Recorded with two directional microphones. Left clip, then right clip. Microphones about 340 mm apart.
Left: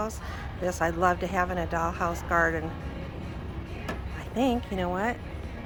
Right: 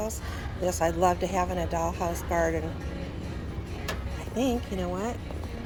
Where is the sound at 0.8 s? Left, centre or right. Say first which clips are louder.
Even; left.